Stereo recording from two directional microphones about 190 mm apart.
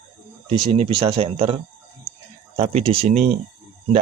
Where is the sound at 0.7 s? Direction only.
30° right (ahead or behind).